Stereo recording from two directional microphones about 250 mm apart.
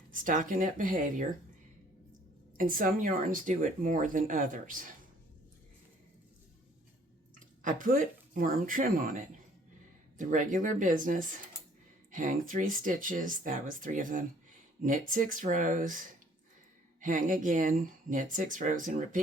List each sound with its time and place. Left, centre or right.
0.1 s speech: right
2.6 s speech: right
7.3 s speech: right